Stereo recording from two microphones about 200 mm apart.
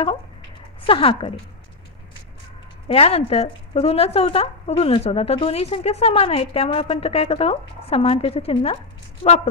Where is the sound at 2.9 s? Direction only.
30° left (ahead or behind).